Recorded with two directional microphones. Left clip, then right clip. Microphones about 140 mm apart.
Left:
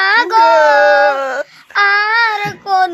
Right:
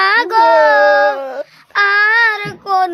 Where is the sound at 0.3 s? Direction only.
5° right (ahead or behind).